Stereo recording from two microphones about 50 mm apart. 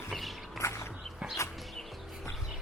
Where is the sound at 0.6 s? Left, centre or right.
Left.